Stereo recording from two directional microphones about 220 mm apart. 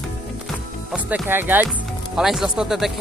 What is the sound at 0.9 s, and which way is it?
Speech, 5° right (ahead or behind).